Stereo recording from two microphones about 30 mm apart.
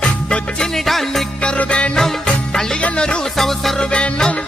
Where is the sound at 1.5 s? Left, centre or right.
Left.